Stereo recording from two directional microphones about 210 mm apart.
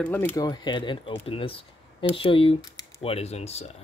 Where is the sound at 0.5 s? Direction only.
20° left (ahead or behind).